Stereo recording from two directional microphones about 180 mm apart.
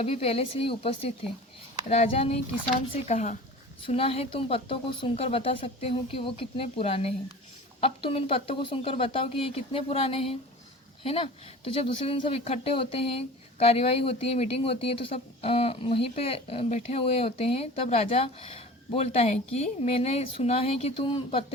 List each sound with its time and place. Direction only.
0.0 s speech: 35° left (ahead or behind)